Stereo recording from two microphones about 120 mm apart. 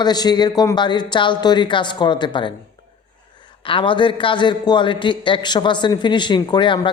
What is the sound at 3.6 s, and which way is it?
A man's voice, 45° left (ahead or behind).